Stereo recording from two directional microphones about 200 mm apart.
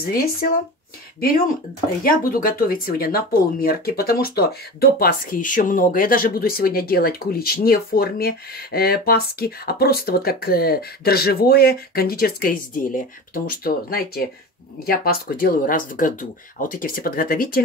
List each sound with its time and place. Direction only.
0.0 s speech: 50° left (ahead or behind)
2.0 s speech: 45° left (ahead or behind)